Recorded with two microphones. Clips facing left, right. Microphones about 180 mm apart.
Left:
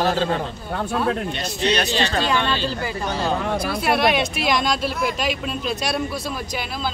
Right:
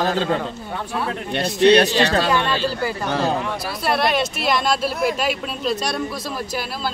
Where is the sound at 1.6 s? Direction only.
60° right (ahead or behind).